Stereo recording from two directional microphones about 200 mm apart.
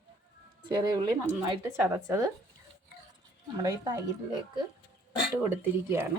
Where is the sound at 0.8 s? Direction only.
20° right (ahead or behind).